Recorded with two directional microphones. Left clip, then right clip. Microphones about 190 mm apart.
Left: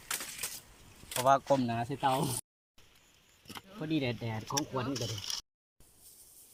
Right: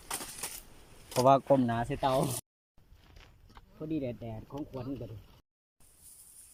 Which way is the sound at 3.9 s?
5° right (ahead or behind).